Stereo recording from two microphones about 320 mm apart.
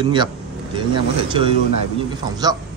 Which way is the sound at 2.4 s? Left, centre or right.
Centre.